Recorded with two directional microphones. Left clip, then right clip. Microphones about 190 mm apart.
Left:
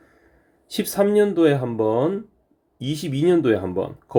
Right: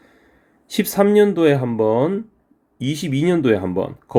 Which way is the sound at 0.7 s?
25° right (ahead or behind).